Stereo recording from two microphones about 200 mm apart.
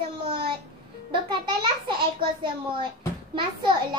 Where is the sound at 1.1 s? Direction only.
25° right (ahead or behind).